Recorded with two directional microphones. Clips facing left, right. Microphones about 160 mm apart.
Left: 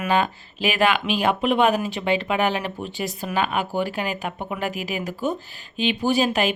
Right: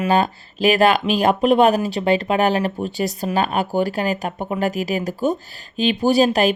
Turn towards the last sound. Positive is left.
turn(degrees=-40)  # may be behind; listen again after turning